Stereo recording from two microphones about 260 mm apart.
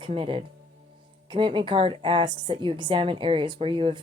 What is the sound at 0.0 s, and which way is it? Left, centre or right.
A woman's voice, centre.